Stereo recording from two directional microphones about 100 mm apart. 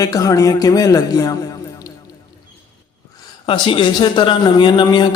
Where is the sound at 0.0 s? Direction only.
35° left (ahead or behind).